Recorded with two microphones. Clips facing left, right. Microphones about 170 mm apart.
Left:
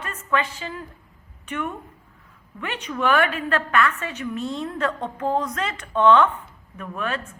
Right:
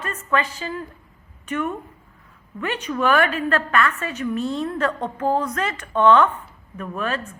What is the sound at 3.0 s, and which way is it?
A woman's voice, 15° left (ahead or behind).